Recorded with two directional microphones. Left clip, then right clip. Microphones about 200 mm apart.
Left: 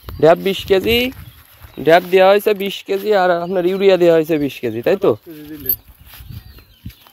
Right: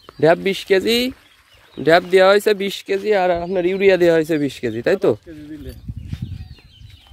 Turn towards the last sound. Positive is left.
turn(degrees=50)  # may be behind; listen again after turning